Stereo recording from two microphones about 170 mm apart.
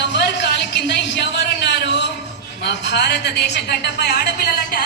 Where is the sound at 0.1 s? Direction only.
80° left.